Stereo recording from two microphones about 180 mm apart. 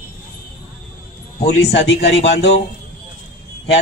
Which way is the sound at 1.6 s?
65° left (ahead or behind).